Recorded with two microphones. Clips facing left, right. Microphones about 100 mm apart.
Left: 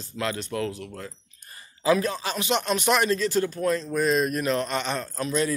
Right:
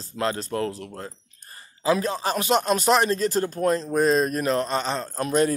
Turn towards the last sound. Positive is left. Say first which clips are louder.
# right 4 dB
turn(degrees=-50)  # may be behind; listen again after turning